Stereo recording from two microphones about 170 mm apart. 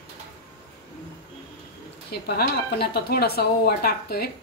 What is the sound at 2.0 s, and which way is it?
Speech, 70° left (ahead or behind).